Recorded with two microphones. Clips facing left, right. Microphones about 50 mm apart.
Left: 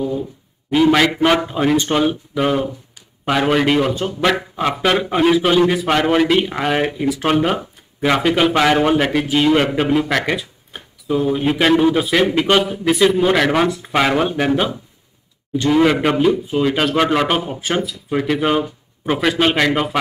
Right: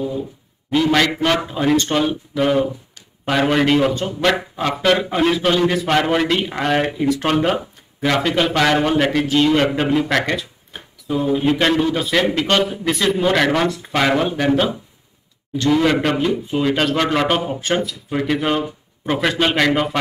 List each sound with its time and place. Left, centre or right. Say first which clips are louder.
0.7 s speech: left 3 dB; centre